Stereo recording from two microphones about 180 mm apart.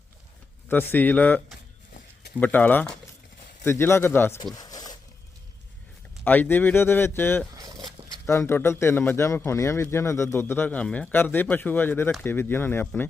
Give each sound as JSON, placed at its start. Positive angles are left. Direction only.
{"t": 0.7, "sound": "a man's voice", "side_deg": 10}
{"t": 2.4, "sound": "a man's voice", "side_deg": 10}
{"t": 4.5, "sound": "a sound", "side_deg": 20}
{"t": 6.2, "sound": "a man's voice", "side_deg": 10}
{"t": 7.6, "sound": "dog", "side_deg": -20}
{"t": 8.3, "sound": "a man's voice", "side_deg": 15}